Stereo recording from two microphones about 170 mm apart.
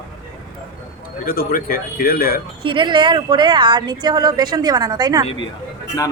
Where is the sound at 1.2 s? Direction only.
60° left (ahead or behind).